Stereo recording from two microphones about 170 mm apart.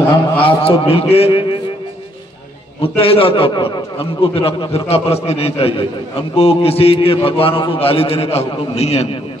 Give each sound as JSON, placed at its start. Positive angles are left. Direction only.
{"t": 0.4, "sound": "a man's voice", "side_deg": 35}
{"t": 2.8, "sound": "a man's voice", "side_deg": 35}